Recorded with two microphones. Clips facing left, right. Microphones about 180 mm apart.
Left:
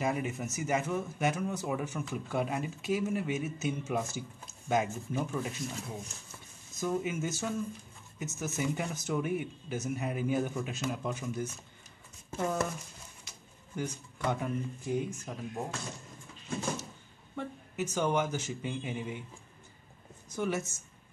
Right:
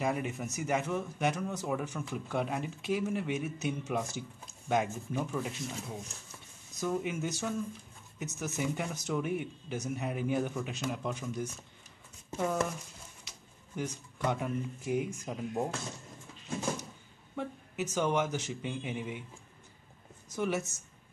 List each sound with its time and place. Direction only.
0.0 s speech: centre (ahead or behind); by 15.4 s 15° right (ahead or behind)
17.4 s speech: centre (ahead or behind)
20.2 s a woman's voice: centre (ahead or behind)